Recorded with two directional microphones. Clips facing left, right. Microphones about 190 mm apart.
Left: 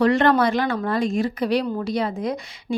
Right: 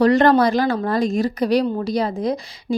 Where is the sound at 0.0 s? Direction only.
40° right (ahead or behind).